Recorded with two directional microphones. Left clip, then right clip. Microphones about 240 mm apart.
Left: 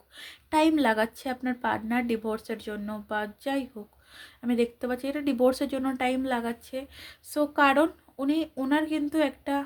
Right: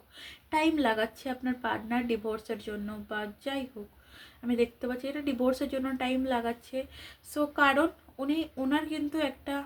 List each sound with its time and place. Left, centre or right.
0.2 s speech: left